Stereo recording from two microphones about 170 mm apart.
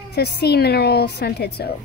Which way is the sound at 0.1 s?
70° left (ahead or behind).